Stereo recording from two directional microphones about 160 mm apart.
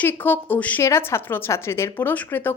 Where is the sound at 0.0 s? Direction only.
10° left (ahead or behind).